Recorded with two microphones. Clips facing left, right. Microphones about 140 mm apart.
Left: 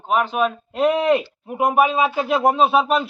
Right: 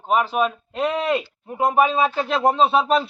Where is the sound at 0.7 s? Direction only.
15° left (ahead or behind).